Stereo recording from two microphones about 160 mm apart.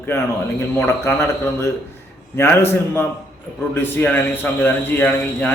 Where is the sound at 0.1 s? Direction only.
15° left (ahead or behind).